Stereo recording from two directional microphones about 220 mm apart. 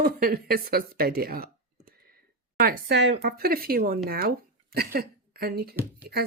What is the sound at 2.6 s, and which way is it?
A woman's voice, 45° right (ahead or behind).